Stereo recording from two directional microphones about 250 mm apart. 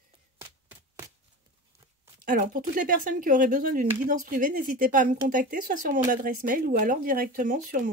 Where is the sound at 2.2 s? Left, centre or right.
Right.